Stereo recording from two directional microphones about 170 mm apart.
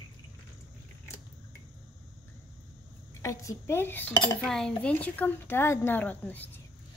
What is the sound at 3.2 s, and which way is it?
A woman's voice, 20° left (ahead or behind).